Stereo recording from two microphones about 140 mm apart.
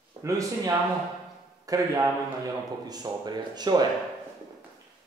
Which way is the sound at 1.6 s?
25° right (ahead or behind).